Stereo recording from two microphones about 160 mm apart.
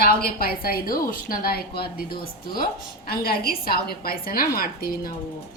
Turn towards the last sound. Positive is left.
turn(degrees=65)  # may be behind; listen again after turning